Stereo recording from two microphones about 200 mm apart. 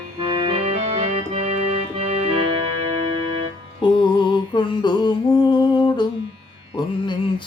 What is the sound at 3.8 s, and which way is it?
Music, 20° left (ahead or behind).